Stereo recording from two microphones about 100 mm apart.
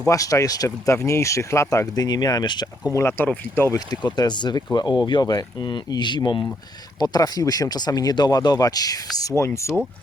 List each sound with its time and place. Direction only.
0.1 s speech: 35° left (ahead or behind)
2.9 s speech: 25° left (ahead or behind)
3.8 s speech: 40° left (ahead or behind)